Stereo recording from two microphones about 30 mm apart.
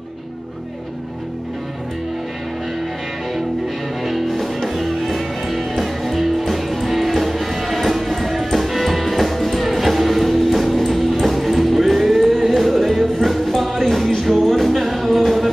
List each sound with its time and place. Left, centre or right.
4.0 s music: centre